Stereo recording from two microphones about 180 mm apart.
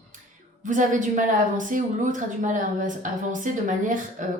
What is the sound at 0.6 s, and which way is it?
A woman's voice, 45° right (ahead or behind).